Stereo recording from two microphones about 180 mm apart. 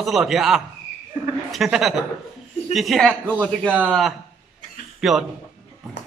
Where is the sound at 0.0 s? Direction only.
Centre (ahead or behind).